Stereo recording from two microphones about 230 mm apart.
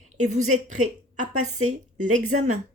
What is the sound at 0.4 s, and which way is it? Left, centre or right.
A woman's voice, right.